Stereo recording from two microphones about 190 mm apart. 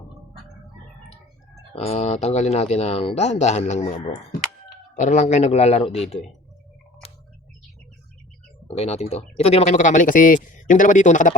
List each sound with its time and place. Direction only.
1.7 s speech: 30° left (ahead or behind)
4.9 s speech: 40° left (ahead or behind)
8.6 s speech: 35° left (ahead or behind)